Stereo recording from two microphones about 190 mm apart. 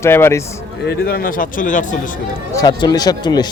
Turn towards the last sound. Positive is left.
turn(degrees=20)  # may be behind; listen again after turning